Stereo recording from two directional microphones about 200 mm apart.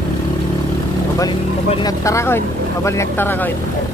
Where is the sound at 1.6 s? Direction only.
20° left (ahead or behind).